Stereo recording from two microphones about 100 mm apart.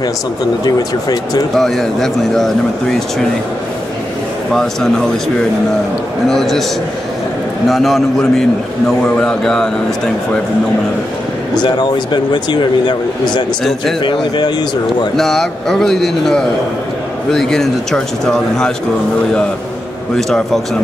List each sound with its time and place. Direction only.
0.7 s speech: 40° left (ahead or behind)
1.6 s a man's voice: 5° left (ahead or behind)
6.2 s a man's voice: 5° left (ahead or behind)
7.6 s a man's voice: centre (ahead or behind)
11.6 s speech: 50° left (ahead or behind)
15.1 s a man's voice: 5° left (ahead or behind)
20.2 s a man's voice: 5° left (ahead or behind)